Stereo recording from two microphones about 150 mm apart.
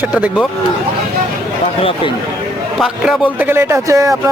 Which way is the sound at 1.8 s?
40° left (ahead or behind).